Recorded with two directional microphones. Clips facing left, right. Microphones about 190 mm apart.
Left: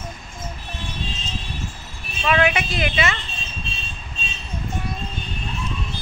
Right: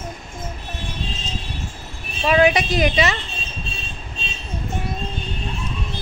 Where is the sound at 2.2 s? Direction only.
35° right (ahead or behind).